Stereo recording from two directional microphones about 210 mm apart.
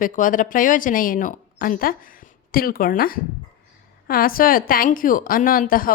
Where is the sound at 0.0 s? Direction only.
40° left (ahead or behind).